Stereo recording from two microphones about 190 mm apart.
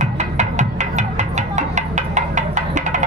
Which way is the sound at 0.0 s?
40° right (ahead or behind).